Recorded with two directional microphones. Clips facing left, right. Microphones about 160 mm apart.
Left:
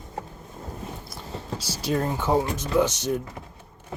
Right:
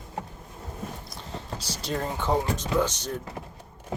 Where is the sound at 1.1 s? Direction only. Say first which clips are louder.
Left 3 dB; 10° left (ahead or behind).